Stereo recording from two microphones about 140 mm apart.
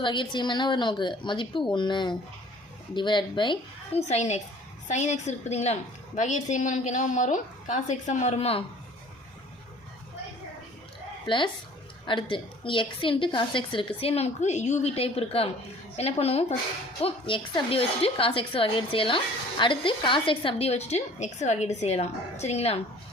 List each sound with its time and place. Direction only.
0.0 s a woman's voice: 35° left (ahead or behind)
4.1 s a woman's voice: 55° left (ahead or behind)
11.3 s a woman's voice: 35° left (ahead or behind)